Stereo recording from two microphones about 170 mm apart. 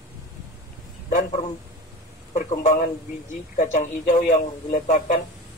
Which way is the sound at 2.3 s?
50° left (ahead or behind).